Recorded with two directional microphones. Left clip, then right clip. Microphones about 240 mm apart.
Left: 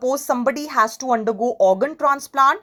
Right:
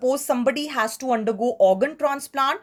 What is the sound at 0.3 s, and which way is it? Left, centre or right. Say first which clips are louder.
Speech: left 2 dB; centre.